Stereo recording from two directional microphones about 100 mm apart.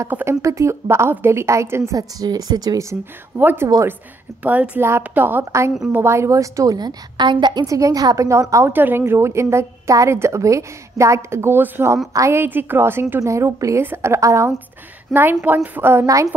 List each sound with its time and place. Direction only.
0.1 s a woman's voice: 25° right (ahead or behind)
3.3 s a woman's voice: 20° right (ahead or behind)
3.6 s a woman's voice: 35° right (ahead or behind)
4.4 s a woman's voice: 15° right (ahead or behind)
5.4 s a woman's voice: 30° right (ahead or behind); by 7.6 s 50° right (ahead or behind)
7.6 s a woman's voice: 35° right (ahead or behind)
15.1 s a woman's voice: 5° left (ahead or behind)
15.4 s a woman's voice: 15° right (ahead or behind)